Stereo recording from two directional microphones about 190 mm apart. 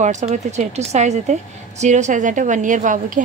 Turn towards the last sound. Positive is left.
turn(degrees=-40)  # may be behind; listen again after turning